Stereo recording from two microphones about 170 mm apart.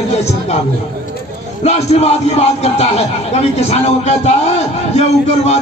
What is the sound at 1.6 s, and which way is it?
Speech, 40° left (ahead or behind).